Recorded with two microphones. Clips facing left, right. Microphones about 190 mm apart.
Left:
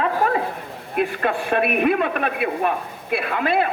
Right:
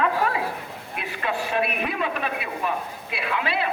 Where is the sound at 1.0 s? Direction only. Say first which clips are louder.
Left 7 dB; 50° left (ahead or behind).